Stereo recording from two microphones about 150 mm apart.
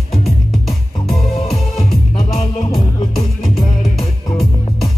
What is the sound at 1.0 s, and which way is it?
Music, 45° left (ahead or behind).